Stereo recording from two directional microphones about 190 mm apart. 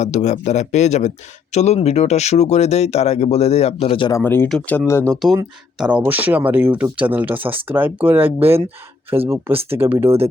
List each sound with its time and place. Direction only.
0.0 s speech: 35° left (ahead or behind)
4.2 s speech: 10° left (ahead or behind)
5.1 s speech: centre (ahead or behind)